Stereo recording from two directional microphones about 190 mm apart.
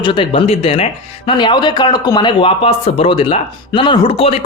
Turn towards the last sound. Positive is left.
turn(degrees=30)  # may be behind; listen again after turning